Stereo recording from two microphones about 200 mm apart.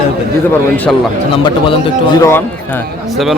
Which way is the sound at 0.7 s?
10° left (ahead or behind).